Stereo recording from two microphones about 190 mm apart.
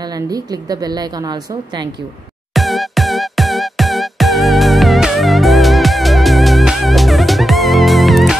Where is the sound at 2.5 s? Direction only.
Centre (ahead or behind).